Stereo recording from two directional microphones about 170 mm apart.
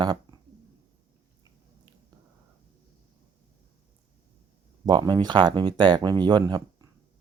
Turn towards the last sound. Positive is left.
turn(degrees=-25)  # may be behind; listen again after turning